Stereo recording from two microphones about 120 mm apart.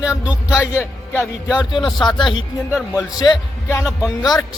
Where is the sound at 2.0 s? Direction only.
40° left (ahead or behind).